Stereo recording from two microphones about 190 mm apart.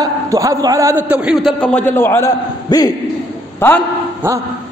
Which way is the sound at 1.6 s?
10° left (ahead or behind).